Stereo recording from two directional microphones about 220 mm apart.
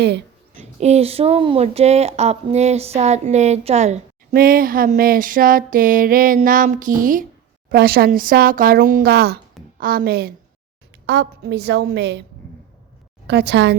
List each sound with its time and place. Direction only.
0.5 s speech: 30° right (ahead or behind); by 12.2 s 50° right (ahead or behind)
13.2 s speech: 50° right (ahead or behind)